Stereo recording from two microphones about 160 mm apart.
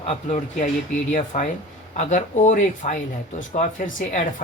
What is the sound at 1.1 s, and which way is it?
Speech, 50° left (ahead or behind).